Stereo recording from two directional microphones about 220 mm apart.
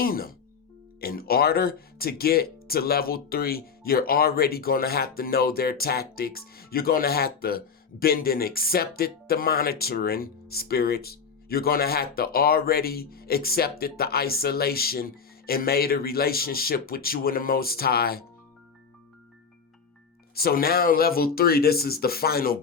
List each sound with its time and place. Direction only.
0.0 s speech: 40° left (ahead or behind)
20.3 s speech: 45° left (ahead or behind)